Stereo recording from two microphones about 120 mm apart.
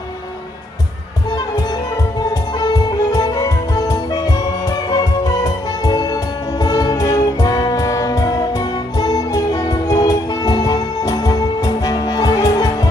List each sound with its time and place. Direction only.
2.6 s music: 30° left (ahead or behind)